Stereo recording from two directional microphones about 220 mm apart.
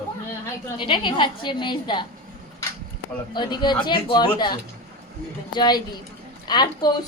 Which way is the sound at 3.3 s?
20° left (ahead or behind).